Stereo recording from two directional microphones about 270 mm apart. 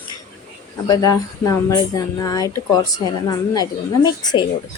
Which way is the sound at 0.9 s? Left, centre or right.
Centre.